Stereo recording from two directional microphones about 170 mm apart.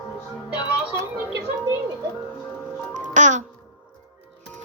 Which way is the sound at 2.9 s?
45° right (ahead or behind).